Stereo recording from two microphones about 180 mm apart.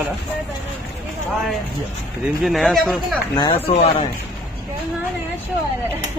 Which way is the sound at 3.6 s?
35° left (ahead or behind).